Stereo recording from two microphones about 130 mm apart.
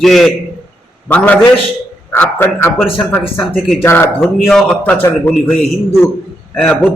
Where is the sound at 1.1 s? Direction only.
10° left (ahead or behind).